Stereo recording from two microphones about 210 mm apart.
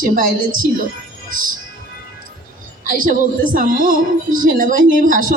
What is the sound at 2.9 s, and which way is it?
A woman's voice, 40° right (ahead or behind).